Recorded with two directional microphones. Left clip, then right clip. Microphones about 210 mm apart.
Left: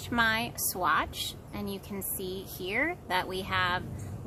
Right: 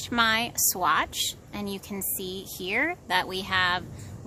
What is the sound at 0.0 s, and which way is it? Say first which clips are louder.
Speech: right 4 dB; 35° right (ahead or behind).